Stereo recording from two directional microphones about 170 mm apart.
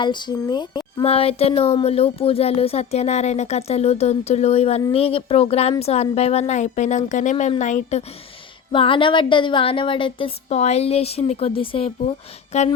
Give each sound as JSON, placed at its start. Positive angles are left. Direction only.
{"t": 0.0, "sound": "speech", "side_deg": 25}
{"t": 8.7, "sound": "speech", "side_deg": 30}